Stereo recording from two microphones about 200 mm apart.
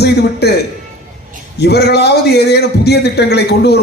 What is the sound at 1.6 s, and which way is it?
A man's voice, 55° left (ahead or behind).